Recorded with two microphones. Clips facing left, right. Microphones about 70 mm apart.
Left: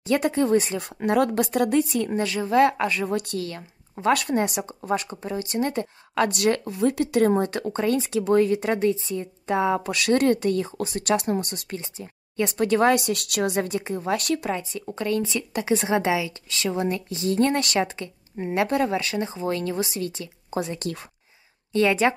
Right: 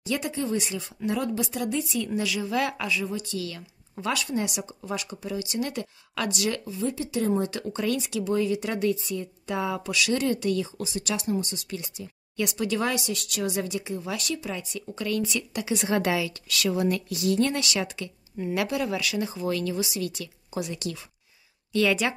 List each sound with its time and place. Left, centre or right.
0.0 s a woman's voice: left
6.3 s speech: left
8.2 s speech: left
11.8 s speech: left
14.5 s a woman's voice: left
15.9 s a woman's voice: left